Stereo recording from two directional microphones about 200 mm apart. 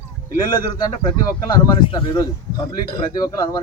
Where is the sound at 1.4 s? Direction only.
20° left (ahead or behind).